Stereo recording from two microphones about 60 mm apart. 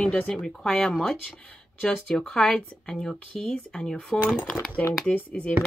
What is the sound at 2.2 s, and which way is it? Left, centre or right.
Speech, centre.